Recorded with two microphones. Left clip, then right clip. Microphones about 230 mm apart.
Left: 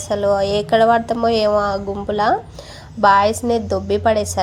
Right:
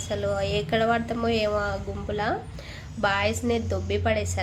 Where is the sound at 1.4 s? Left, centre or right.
Centre.